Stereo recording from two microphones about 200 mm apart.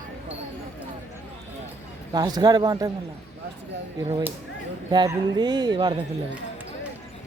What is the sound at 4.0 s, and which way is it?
Speech, 25° right (ahead or behind).